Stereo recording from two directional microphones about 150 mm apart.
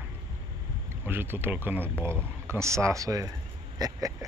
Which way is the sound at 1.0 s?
15° right (ahead or behind).